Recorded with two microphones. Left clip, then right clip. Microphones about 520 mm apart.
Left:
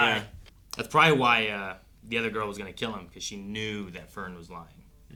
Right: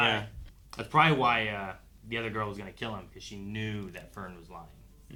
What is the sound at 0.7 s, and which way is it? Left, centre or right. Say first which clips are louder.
Speech: left 3 dB; right.